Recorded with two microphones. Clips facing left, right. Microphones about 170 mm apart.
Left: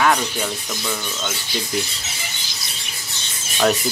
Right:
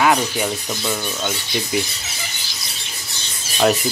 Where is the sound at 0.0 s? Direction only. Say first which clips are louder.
Right 2 dB; 10° right (ahead or behind).